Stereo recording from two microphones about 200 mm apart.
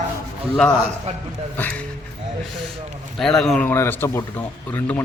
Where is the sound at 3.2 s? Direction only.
Centre (ahead or behind).